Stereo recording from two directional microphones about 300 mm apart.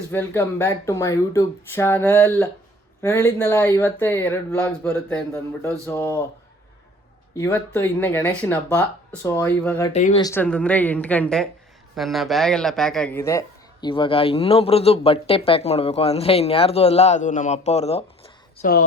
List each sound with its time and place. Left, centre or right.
0.1 s speech: centre
7.3 s speech: centre
9.9 s speech: left